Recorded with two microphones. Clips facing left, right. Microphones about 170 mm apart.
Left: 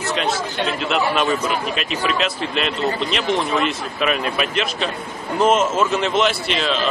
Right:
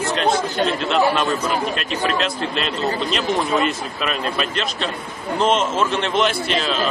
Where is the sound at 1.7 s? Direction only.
5° left (ahead or behind).